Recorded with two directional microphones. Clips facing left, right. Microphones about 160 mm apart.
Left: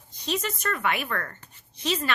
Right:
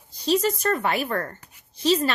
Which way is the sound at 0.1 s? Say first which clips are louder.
Right 8 dB; 35° right (ahead or behind).